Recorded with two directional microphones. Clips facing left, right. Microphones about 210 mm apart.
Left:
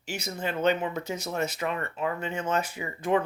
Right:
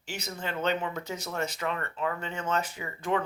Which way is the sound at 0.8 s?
20° left (ahead or behind).